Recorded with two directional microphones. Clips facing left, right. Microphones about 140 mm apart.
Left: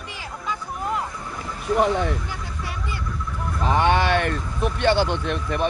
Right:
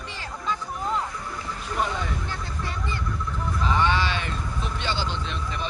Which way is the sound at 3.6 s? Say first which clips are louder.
Left 4 dB; 55° left (ahead or behind).